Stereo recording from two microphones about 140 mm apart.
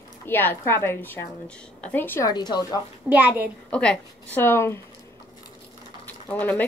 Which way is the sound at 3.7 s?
5° left (ahead or behind).